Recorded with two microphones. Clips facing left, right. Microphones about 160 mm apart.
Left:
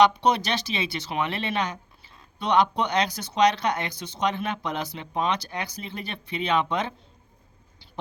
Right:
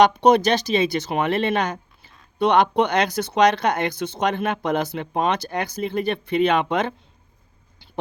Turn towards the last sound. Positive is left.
turn(degrees=-60)  # may be behind; listen again after turning